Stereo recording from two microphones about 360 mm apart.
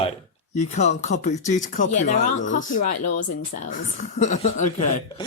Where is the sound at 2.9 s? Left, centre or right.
Left.